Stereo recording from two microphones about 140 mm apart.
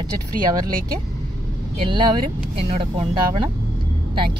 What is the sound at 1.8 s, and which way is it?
Speech, 35° right (ahead or behind).